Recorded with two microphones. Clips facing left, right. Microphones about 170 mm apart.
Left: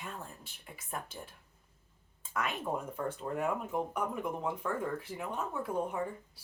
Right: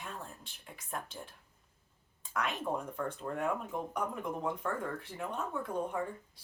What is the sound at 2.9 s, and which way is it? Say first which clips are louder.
Speech: left 1 dB; 5° left (ahead or behind).